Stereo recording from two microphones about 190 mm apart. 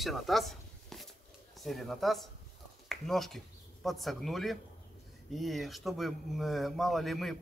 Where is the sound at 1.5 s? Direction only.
Centre (ahead or behind).